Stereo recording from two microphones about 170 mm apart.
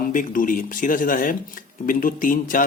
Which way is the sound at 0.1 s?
50° left (ahead or behind).